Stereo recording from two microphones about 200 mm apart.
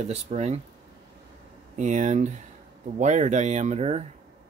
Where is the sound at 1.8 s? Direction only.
35° right (ahead or behind).